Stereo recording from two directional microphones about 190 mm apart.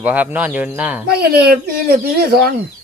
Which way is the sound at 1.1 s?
55° right (ahead or behind).